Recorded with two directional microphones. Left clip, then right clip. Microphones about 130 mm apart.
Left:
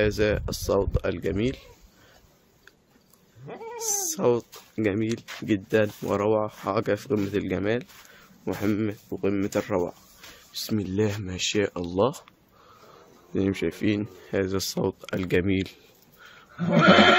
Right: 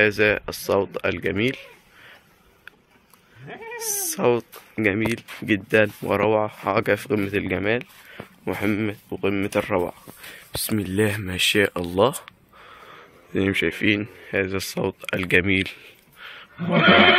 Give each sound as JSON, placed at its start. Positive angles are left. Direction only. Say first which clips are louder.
{"t": 0.0, "sound": "speech", "louder": "right 5 dB", "side_deg": 10}
{"t": 3.7, "sound": "speech", "louder": "even", "side_deg": 0}
{"t": 14.3, "sound": "speech", "louder": "right 2 dB", "side_deg": 30}